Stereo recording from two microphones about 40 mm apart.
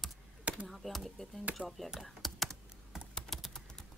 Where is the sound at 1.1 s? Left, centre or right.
Centre.